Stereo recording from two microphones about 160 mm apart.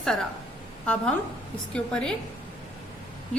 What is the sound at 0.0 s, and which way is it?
Speech, 5° left (ahead or behind).